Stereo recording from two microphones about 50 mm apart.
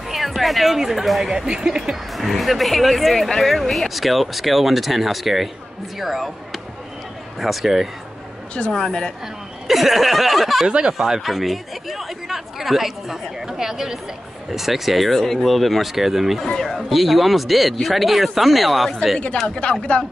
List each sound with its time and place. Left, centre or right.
0.1 s speech: centre
1.3 s speech: centre
2.1 s speech: centre
8.7 s speech: centre
9.7 s speech: centre
10.7 s speech: centre
11.0 s speech: centre
19.6 s speech: left